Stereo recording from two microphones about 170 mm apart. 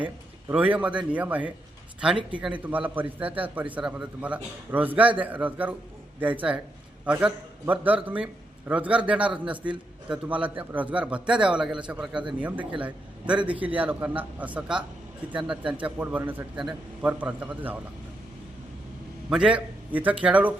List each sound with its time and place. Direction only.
0.0 s a man's voice: 10° right (ahead or behind)
19.3 s a man's voice: 5° right (ahead or behind)